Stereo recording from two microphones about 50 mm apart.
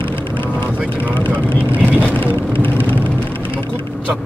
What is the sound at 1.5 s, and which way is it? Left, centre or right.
Vehicle, right.